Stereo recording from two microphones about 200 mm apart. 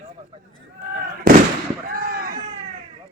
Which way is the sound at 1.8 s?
45° right (ahead or behind).